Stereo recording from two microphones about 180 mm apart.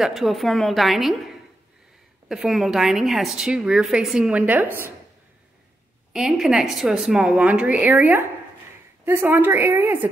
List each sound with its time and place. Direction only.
0.0 s a woman's voice: centre (ahead or behind)
2.2 s a woman's voice: centre (ahead or behind)
6.1 s a woman's voice: centre (ahead or behind)